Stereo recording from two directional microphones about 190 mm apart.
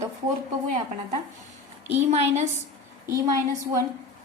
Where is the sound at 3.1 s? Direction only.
20° right (ahead or behind).